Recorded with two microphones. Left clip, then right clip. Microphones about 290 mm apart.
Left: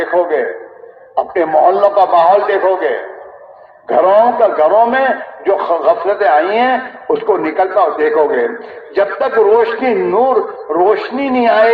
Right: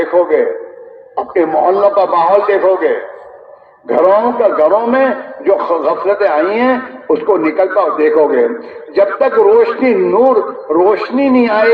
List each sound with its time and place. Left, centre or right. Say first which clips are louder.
0.0 s a man's voice: right 2 dB; left